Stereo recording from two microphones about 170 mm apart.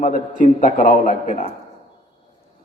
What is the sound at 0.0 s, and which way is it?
Mantra, 50° left (ahead or behind).